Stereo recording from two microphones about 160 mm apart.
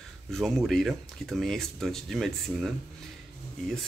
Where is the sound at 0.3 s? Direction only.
Centre (ahead or behind).